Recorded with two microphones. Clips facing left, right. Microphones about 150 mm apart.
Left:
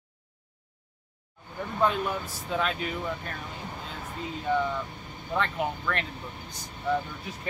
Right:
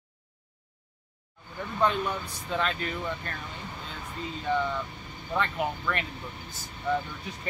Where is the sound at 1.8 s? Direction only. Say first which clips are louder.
Even; 5° left (ahead or behind).